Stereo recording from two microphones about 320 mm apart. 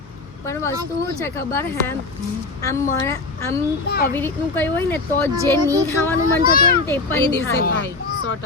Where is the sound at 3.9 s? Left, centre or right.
Left.